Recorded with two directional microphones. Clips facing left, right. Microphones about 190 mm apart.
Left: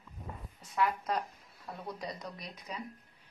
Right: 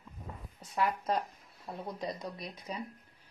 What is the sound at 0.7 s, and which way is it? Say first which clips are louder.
Speech: right 1 dB; 30° right (ahead or behind).